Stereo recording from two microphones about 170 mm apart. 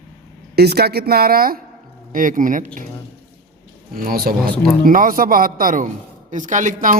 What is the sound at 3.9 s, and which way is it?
A man's voice, 60° right (ahead or behind).